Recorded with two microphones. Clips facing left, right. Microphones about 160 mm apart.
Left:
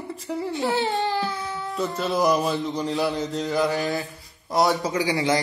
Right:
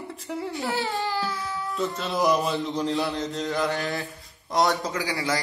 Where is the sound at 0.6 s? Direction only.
20° left (ahead or behind).